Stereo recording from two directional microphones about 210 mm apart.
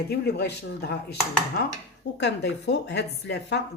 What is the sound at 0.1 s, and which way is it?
Speech, 50° left (ahead or behind).